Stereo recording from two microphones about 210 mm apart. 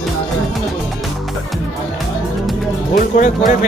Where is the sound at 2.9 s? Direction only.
35° left (ahead or behind).